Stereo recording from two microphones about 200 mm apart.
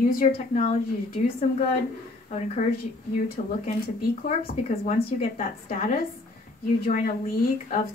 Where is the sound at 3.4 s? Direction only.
40° left (ahead or behind).